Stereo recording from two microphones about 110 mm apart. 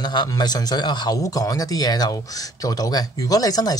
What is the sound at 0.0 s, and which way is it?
Speech, 40° left (ahead or behind).